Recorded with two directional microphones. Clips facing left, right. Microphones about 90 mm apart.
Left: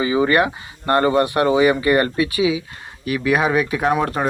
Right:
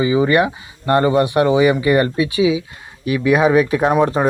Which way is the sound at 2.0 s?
25° right (ahead or behind).